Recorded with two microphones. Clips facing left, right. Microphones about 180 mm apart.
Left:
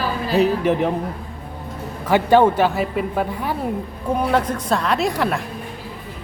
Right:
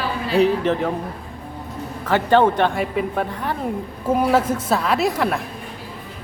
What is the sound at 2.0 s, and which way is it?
Speech, 10° left (ahead or behind).